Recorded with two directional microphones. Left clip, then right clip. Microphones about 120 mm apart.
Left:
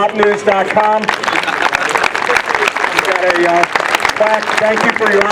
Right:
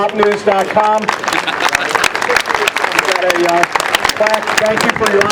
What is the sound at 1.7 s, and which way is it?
Applause, 55° right (ahead or behind).